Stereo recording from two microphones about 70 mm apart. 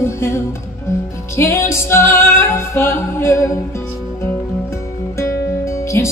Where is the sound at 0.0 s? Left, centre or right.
Left.